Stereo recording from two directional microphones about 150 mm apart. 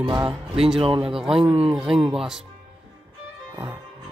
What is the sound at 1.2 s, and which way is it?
Speech, 5° right (ahead or behind).